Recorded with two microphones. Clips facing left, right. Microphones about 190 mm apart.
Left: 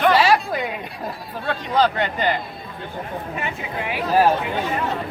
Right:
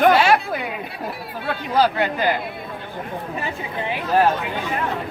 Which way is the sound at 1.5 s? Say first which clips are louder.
Even; 5° right (ahead or behind).